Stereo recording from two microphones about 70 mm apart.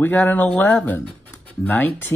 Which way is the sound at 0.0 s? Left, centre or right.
Left.